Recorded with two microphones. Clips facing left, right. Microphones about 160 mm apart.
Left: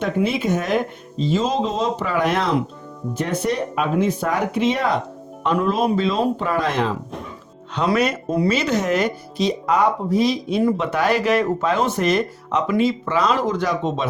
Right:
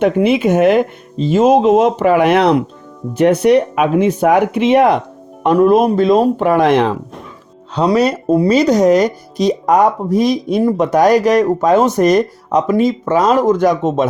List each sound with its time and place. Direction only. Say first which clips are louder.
0.0 s speech: right 8 dB; 65° right (ahead or behind)
5.4 s speech: right 9 dB; 50° right (ahead or behind)
7.9 s speech: right 8 dB; 35° right (ahead or behind)